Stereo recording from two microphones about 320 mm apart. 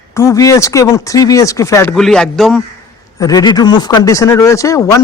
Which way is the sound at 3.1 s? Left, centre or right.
Centre.